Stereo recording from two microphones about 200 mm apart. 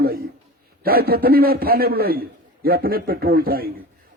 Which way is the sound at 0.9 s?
50° right (ahead or behind).